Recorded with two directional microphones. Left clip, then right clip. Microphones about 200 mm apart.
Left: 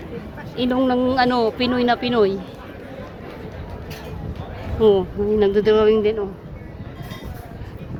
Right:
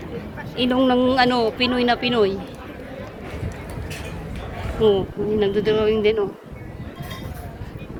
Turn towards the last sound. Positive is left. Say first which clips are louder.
# right 2 dB
turn(degrees=0)  # may be behind; listen again after turning